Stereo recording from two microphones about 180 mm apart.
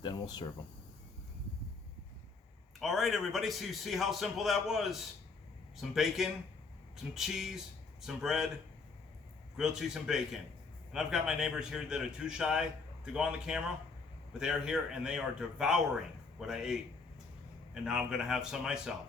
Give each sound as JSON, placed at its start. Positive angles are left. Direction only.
{"t": 0.0, "sound": "speech", "side_deg": 25}
{"t": 2.8, "sound": "a man's voice", "side_deg": 0}
{"t": 9.6, "sound": "a man's voice", "side_deg": -5}
{"t": 17.8, "sound": "a man's voice", "side_deg": -5}